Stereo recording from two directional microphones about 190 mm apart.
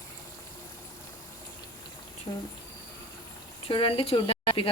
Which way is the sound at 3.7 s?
25° left (ahead or behind).